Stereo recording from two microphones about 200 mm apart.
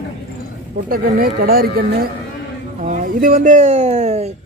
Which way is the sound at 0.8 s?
45° right (ahead or behind).